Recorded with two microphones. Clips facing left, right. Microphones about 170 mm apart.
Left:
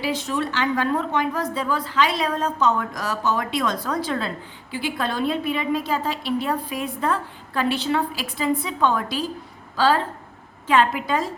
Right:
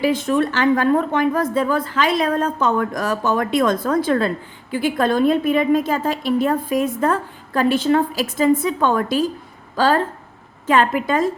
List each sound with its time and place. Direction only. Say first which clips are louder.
0.0 s a woman's voice: right 7 dB; 50° right (ahead or behind)